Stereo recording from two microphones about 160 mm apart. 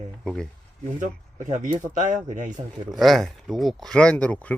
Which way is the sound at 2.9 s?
Centre (ahead or behind).